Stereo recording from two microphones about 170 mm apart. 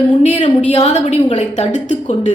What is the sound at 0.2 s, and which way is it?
A woman's voice, 30° left (ahead or behind).